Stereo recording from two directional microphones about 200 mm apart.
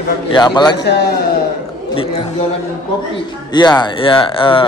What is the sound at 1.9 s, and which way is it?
Speech, 25° left (ahead or behind).